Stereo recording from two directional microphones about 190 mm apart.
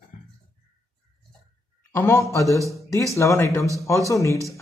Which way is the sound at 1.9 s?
15° left (ahead or behind).